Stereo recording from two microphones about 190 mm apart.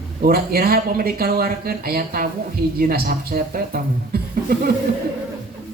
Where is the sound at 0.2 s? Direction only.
50° right (ahead or behind).